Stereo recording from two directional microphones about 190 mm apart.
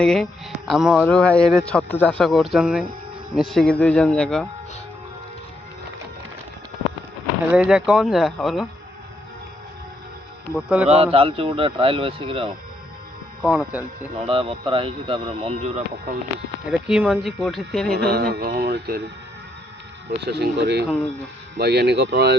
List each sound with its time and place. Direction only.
0.0 s speech: 5° left (ahead or behind)
7.4 s speech: 5° right (ahead or behind)
10.8 s speech: 30° right (ahead or behind)
13.4 s speech: 5° right (ahead or behind)
14.3 s speech: 30° right (ahead or behind)
16.6 s speech: 5° right (ahead or behind)
17.9 s speech: 55° right (ahead or behind)
20.1 s speech: 60° right (ahead or behind)